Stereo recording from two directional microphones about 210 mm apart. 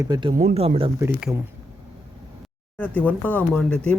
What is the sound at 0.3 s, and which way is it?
Speech, 30° right (ahead or behind).